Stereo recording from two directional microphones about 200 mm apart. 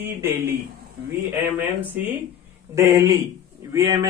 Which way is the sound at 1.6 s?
10° right (ahead or behind).